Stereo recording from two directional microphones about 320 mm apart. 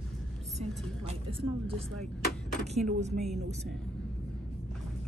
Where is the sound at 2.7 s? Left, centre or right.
Right.